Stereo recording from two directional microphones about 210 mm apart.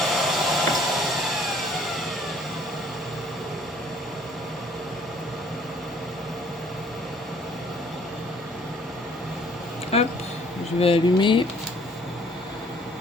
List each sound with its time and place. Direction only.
0.0 s hair dryer: centre (ahead or behind)
9.9 s a sound: 30° left (ahead or behind)
10.8 s speech: 25° left (ahead or behind)